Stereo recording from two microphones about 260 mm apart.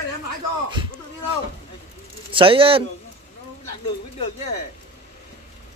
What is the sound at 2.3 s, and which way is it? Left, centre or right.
Speech, centre.